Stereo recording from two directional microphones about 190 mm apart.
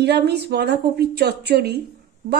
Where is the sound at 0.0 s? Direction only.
60° right (ahead or behind).